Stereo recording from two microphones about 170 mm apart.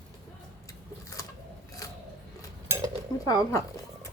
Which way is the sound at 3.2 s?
20° left (ahead or behind).